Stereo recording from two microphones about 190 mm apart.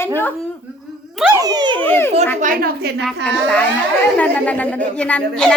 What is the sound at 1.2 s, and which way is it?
Speech, 15° right (ahead or behind).